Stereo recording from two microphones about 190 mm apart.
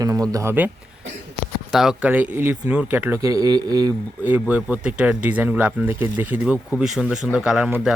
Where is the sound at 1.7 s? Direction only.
5° right (ahead or behind).